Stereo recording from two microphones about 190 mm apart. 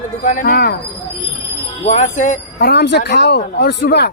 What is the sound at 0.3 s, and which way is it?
Speech, 45° left (ahead or behind).